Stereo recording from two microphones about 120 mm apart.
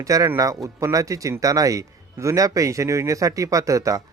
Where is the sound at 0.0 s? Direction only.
30° right (ahead or behind).